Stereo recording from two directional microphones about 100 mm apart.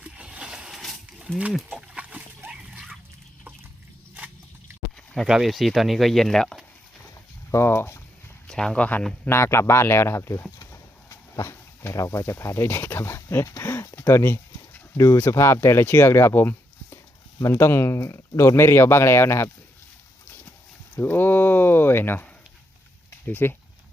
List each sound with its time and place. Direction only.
0.0 s wild animals: 10° right (ahead or behind)
1.7 s dog: 10° right (ahead or behind)
5.1 s speech: centre (ahead or behind)
7.5 s speech: 25° left (ahead or behind)
8.4 s speech: 5° left (ahead or behind)
9.3 s speech: 25° left (ahead or behind)
10.6 s a sound: 30° left (ahead or behind)
14.0 s speech: 25° left (ahead or behind)
20.2 s horse: 15° left (ahead or behind)
20.9 s speech: 20° left (ahead or behind)